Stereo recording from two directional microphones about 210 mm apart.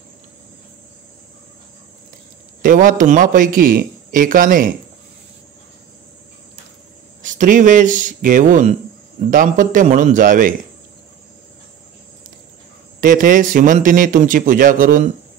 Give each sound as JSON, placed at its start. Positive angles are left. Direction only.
{"t": 2.6, "sound": "a man's voice", "side_deg": -40}
{"t": 7.2, "sound": "a man's voice", "side_deg": -40}
{"t": 13.0, "sound": "a man's voice", "side_deg": -40}